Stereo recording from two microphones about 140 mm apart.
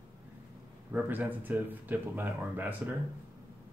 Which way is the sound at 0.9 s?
15° right (ahead or behind).